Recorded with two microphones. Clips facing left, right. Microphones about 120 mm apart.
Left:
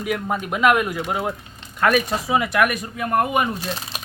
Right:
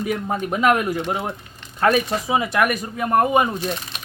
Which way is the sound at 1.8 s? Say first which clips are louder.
Right 1 dB; 25° right (ahead or behind).